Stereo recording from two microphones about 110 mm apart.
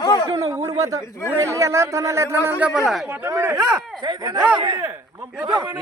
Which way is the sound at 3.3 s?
25° right (ahead or behind).